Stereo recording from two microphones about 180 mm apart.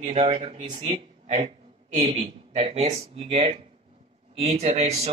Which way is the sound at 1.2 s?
40° right (ahead or behind).